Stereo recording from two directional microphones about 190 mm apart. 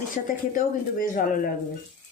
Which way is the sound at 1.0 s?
45° left (ahead or behind).